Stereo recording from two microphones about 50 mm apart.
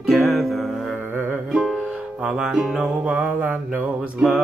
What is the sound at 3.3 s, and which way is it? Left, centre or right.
Mantra, right.